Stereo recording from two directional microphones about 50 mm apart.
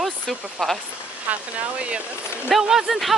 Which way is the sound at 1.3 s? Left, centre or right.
Right.